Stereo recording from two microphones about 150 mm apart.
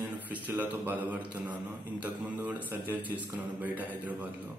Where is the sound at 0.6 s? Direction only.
10° right (ahead or behind).